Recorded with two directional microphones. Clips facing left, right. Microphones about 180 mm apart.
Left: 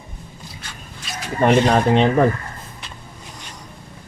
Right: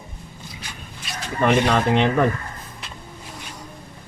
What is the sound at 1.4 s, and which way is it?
Speech, 35° left (ahead or behind).